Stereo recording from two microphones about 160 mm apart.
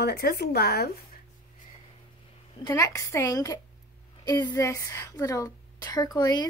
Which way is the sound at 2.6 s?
20° left (ahead or behind).